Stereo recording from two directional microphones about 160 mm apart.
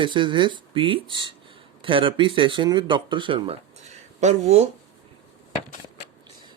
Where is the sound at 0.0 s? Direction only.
30° right (ahead or behind).